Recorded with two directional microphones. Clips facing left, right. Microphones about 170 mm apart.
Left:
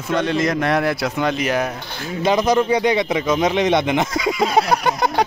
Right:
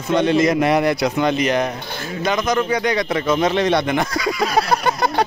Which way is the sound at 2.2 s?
30° left (ahead or behind).